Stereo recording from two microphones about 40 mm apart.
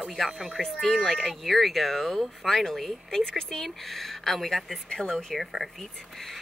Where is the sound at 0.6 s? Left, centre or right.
Centre.